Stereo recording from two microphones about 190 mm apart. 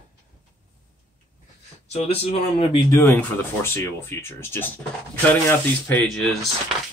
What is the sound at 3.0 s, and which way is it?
Speech, 10° left (ahead or behind).